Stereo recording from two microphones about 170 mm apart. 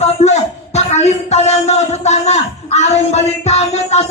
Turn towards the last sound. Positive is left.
turn(degrees=40)  # may be behind; listen again after turning